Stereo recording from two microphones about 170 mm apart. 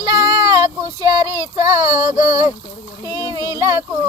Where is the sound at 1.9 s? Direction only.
15° right (ahead or behind).